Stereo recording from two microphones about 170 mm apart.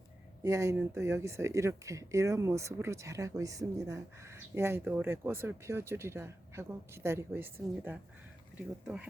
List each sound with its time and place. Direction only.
0.4 s speech: 20° right (ahead or behind)
8.5 s speech: 10° right (ahead or behind)